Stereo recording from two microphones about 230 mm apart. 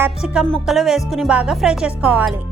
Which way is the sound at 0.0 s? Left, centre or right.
Centre.